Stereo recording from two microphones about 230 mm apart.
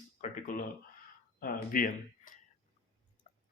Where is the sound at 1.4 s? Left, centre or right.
Left.